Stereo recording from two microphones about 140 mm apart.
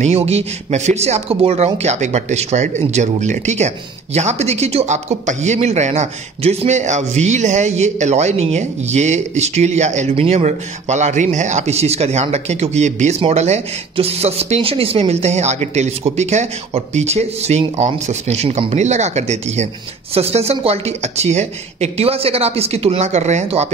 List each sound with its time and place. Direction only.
0.0 s speech: 50° right (ahead or behind)